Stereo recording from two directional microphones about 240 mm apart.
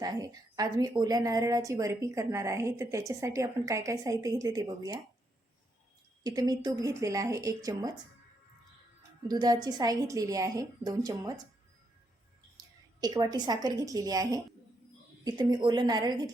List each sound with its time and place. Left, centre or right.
0.0 s a woman's voice: centre
6.2 s a woman's voice: centre
9.2 s a woman's voice: centre
12.5 s a woman's voice: centre